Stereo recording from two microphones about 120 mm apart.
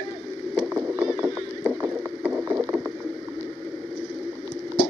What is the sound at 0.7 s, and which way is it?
Rowboat, 15° right (ahead or behind).